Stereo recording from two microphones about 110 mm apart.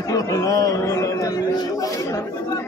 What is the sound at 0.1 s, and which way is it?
Speech, 30° left (ahead or behind).